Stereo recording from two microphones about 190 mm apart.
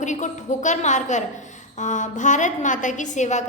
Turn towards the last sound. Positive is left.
turn(degrees=40)  # may be behind; listen again after turning